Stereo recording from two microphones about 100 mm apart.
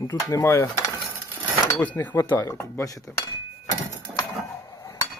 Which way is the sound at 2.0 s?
25° left (ahead or behind).